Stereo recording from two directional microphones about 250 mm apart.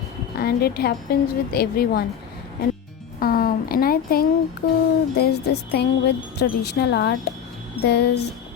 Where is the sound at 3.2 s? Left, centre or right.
Left.